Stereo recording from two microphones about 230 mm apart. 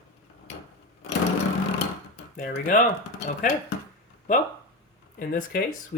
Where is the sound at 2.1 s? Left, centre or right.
Left.